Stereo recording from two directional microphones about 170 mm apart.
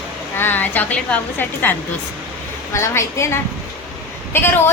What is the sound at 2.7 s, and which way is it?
A woman's voice, 15° left (ahead or behind).